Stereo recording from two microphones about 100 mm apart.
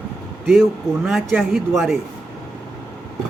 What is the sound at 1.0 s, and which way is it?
Speech, 10° right (ahead or behind).